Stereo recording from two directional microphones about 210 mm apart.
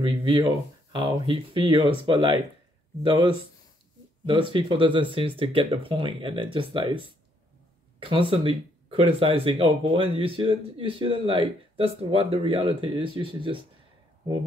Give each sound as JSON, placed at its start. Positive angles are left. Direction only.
{"t": 0.0, "sound": "speech", "side_deg": -25}
{"t": 8.0, "sound": "speech", "side_deg": -25}